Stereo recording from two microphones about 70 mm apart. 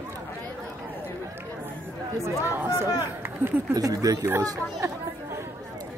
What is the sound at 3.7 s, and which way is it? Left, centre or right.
Speech, right.